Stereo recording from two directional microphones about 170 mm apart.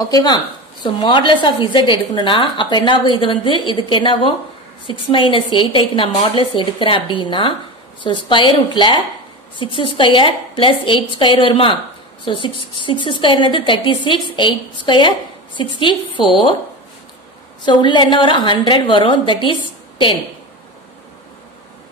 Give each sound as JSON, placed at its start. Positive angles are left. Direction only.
{"t": 0.0, "sound": "a woman's voice", "side_deg": 25}
{"t": 17.6, "sound": "a woman's voice", "side_deg": 25}